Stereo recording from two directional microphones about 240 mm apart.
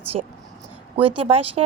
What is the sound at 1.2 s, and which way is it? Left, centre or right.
Speech, right.